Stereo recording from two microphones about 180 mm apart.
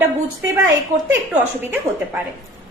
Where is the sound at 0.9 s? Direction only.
45° right (ahead or behind).